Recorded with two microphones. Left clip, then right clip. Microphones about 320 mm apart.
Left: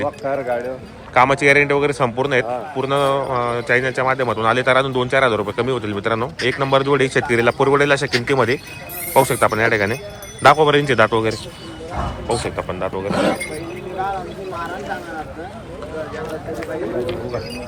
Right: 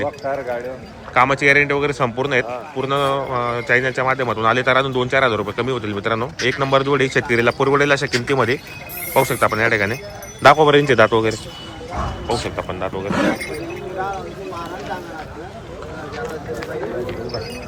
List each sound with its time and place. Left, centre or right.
0.3 s speech: left
1.1 s a man's voice: centre
12.5 s a man's voice: centre